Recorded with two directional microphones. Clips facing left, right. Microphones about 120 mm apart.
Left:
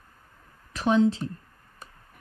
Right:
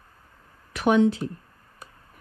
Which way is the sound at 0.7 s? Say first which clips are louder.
Right 2 dB; 30° left (ahead or behind).